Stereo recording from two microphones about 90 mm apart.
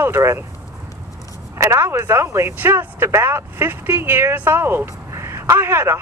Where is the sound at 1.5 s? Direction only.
30° right (ahead or behind).